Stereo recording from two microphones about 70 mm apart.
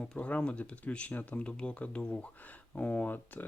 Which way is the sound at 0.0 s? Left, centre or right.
Centre.